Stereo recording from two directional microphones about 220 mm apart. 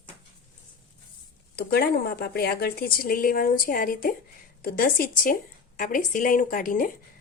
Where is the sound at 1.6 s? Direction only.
45° left (ahead or behind).